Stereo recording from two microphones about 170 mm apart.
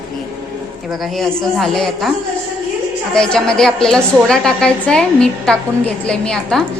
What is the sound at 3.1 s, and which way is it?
A woman's voice, 5° left (ahead or behind).